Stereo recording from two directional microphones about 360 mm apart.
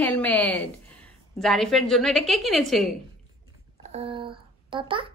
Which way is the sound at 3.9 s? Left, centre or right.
Centre.